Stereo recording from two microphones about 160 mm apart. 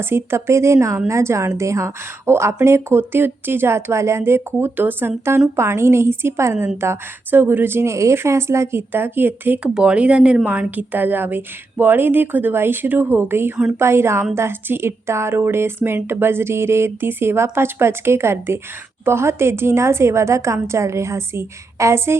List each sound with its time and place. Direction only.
0.0 s speech: 15° right (ahead or behind)